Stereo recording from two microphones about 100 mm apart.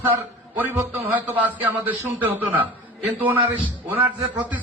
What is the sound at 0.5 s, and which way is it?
A man's voice, 20° right (ahead or behind).